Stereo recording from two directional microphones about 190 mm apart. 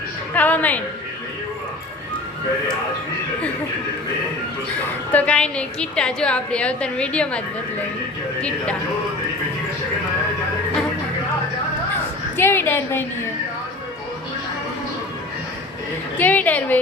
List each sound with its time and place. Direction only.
0.3 s a woman's voice: 10° left (ahead or behind)
5.1 s a woman's voice: 5° left (ahead or behind)
12.4 s a woman's voice: 10° left (ahead or behind)
16.1 s a woman's voice: 10° left (ahead or behind)